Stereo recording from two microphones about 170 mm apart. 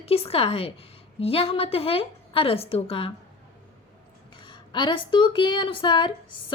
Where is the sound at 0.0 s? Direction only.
35° left (ahead or behind).